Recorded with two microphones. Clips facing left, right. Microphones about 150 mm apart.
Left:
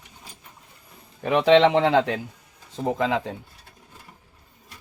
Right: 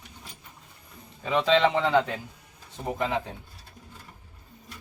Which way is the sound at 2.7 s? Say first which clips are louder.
Left 5 dB; 90° left.